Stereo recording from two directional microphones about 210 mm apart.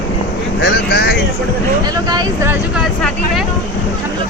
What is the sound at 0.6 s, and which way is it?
Speech, 55° left (ahead or behind).